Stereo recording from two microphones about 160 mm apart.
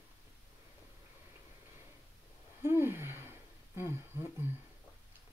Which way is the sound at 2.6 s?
15° right (ahead or behind).